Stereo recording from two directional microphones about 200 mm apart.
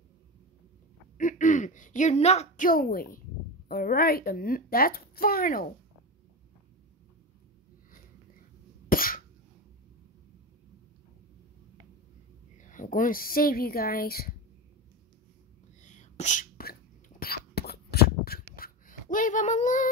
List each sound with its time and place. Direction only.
1.1 s speech: 40° left (ahead or behind)
8.8 s cough: 45° left (ahead or behind)
12.5 s a woman's voice: 40° left (ahead or behind)
15.8 s whispering: 35° left (ahead or behind)
17.2 s a sound: 50° left (ahead or behind)